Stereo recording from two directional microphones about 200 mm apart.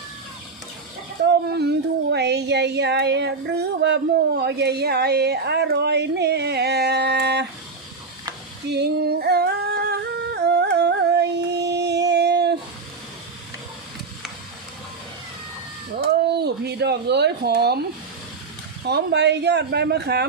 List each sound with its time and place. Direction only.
1.3 s speech: 55° right (ahead or behind)
8.7 s humming: 55° right (ahead or behind)
11.5 s a sound: 55° right (ahead or behind)
16.0 s speech: 55° right (ahead or behind)
18.9 s speech: 55° right (ahead or behind)